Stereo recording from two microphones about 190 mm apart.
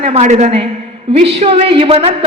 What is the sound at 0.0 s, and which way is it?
A woman's voice, 35° right (ahead or behind).